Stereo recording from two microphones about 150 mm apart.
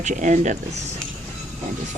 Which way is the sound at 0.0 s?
55° right (ahead or behind).